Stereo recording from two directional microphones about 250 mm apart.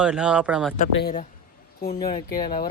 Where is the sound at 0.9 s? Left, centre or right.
Left.